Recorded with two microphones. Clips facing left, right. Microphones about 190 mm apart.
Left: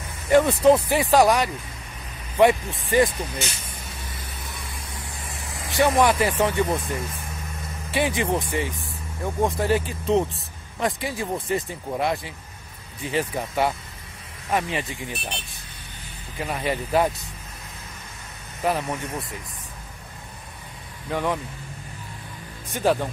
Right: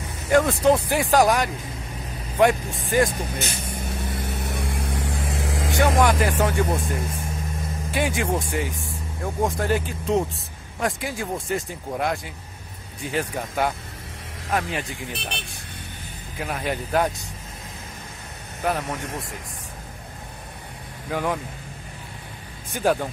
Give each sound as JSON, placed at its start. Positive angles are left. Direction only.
{"t": 0.3, "sound": "speech", "side_deg": 5}
{"t": 3.1, "sound": "vehicle", "side_deg": -55}
{"t": 5.7, "sound": "speech", "side_deg": 0}
{"t": 7.9, "sound": "speech", "side_deg": 0}
{"t": 16.3, "sound": "speech", "side_deg": 0}
{"t": 18.6, "sound": "speech", "side_deg": 0}
{"t": 21.1, "sound": "speech", "side_deg": -5}
{"t": 22.7, "sound": "speech", "side_deg": 0}